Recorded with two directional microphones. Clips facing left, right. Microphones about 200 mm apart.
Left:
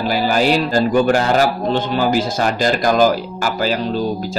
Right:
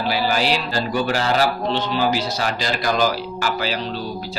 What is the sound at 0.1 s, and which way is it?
Music, 45° left (ahead or behind).